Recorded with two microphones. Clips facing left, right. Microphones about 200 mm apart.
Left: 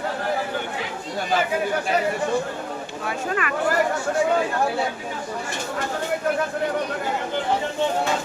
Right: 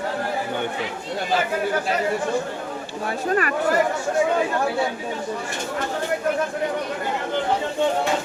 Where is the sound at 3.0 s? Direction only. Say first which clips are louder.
Right 4 dB; 40° right (ahead or behind).